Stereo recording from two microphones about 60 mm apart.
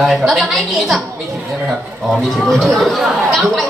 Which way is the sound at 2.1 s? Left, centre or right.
Centre.